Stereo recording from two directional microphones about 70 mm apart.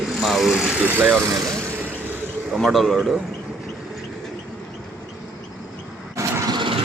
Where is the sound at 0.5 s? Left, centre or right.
Centre.